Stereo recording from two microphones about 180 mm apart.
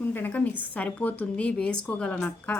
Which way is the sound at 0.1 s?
10° left (ahead or behind).